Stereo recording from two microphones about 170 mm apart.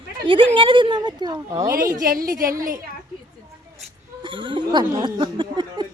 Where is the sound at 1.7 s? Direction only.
55° right (ahead or behind).